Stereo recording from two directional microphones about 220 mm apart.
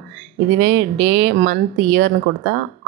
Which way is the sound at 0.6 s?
50° right (ahead or behind).